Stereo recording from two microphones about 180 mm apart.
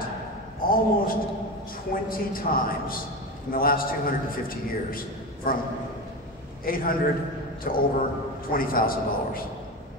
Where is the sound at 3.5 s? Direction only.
55° left (ahead or behind).